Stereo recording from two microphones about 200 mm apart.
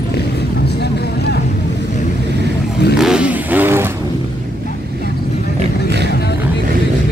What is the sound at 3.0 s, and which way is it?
Vehicle, 5° right (ahead or behind).